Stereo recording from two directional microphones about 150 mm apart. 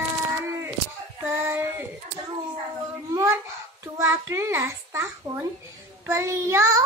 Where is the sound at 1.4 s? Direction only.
15° right (ahead or behind).